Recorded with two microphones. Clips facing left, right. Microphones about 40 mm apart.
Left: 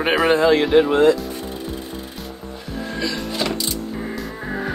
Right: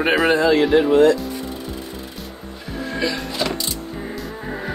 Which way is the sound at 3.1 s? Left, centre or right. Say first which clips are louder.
Even; centre.